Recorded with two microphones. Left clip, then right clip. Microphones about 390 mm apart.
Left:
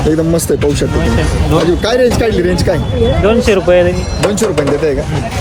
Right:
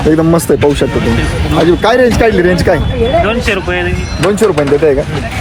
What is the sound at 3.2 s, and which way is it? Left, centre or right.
Speech, left.